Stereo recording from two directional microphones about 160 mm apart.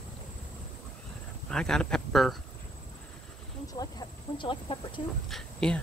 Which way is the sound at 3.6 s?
25° left (ahead or behind).